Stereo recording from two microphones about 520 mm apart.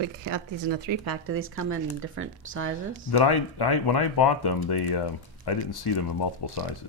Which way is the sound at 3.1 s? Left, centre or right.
Left.